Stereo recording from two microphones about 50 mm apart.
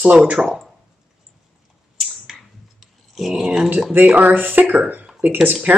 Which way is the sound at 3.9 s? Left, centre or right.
Right.